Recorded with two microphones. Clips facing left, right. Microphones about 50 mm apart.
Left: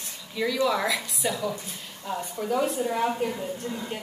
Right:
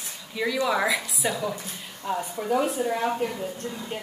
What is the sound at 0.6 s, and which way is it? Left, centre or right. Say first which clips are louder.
A woman's voice: right 1 dB; centre.